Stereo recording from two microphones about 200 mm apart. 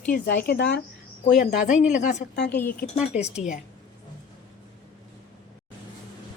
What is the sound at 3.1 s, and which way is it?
Speech, 35° left (ahead or behind).